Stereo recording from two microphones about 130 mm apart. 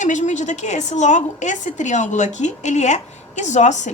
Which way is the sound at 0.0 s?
70° left (ahead or behind).